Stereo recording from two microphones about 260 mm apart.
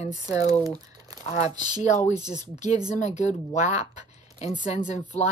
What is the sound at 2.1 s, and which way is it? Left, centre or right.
Speech, centre.